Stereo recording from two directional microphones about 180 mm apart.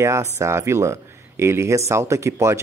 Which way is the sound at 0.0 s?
15° right (ahead or behind).